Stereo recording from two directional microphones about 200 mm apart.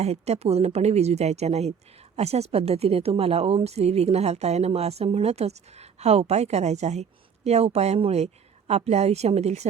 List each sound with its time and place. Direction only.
0.0 s a woman's voice: 30° right (ahead or behind)